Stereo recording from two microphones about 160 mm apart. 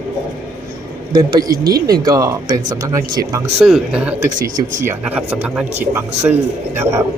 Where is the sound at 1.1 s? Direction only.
25° right (ahead or behind).